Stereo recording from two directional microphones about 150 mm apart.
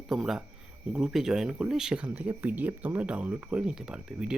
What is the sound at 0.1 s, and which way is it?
Speech, 5° right (ahead or behind).